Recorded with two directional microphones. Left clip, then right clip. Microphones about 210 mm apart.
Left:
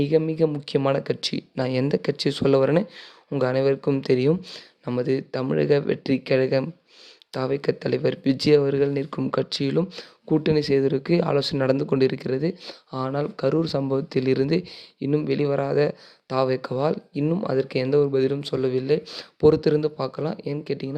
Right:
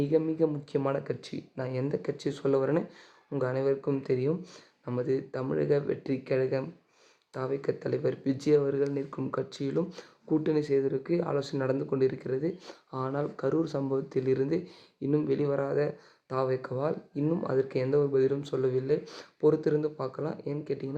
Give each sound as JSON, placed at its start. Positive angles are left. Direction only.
{"t": 0.0, "sound": "speech", "side_deg": 35}